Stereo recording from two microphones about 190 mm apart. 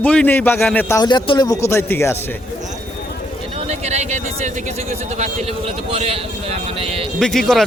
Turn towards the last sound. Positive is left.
turn(degrees=0)  # may be behind; listen again after turning